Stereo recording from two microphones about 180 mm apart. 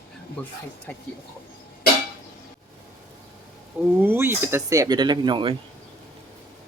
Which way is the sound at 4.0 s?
10° right (ahead or behind).